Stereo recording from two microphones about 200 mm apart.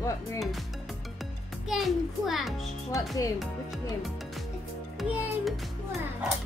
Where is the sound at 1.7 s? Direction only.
Centre (ahead or behind).